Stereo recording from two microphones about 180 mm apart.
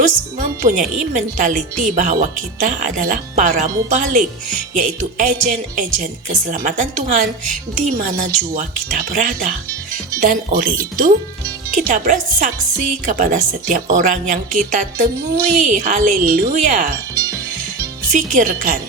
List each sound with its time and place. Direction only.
0.0 s speech: 45° right (ahead or behind)
18.1 s speech: 45° right (ahead or behind)